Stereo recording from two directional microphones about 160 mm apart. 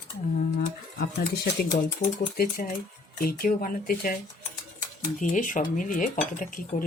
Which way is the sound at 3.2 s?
65° left (ahead or behind).